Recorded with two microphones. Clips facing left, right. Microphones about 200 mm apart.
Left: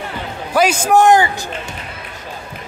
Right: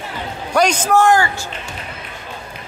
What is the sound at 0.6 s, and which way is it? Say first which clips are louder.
Speech: left 2 dB; 10° left (ahead or behind).